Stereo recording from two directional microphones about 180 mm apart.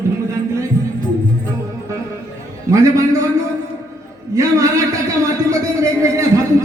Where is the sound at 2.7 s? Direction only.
15° right (ahead or behind).